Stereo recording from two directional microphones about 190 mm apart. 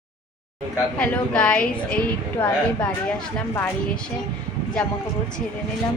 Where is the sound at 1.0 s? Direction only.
5° left (ahead or behind).